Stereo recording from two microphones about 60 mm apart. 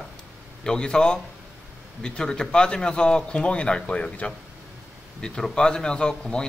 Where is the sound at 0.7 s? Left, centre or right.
Centre.